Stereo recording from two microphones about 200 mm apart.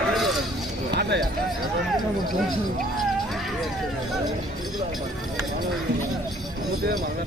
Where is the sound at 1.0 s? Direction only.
55° right (ahead or behind).